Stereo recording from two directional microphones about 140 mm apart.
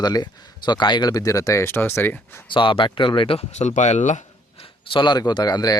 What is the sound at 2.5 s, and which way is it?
Speech, 35° left (ahead or behind).